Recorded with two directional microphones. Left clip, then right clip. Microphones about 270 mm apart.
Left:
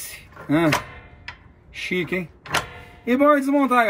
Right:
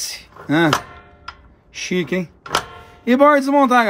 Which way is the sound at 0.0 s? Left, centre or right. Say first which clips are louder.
Right 8 dB; right.